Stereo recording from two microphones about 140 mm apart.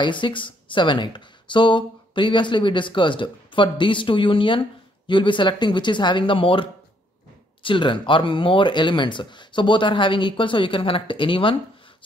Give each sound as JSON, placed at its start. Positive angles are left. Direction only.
{"t": 0.0, "sound": "speech", "side_deg": 35}